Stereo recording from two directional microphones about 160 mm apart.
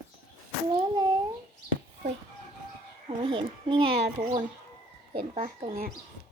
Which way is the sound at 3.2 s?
35° right (ahead or behind).